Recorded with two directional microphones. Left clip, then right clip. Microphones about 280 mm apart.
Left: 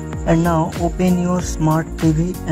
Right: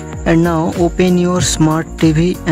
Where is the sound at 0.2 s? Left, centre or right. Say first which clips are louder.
Right 4 dB; centre.